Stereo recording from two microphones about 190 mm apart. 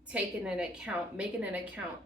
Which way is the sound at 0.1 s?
5° right (ahead or behind).